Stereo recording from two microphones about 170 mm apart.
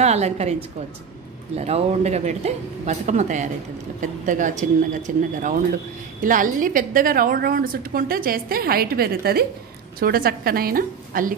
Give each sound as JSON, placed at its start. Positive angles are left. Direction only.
{"t": 0.0, "sound": "a woman's voice", "side_deg": -40}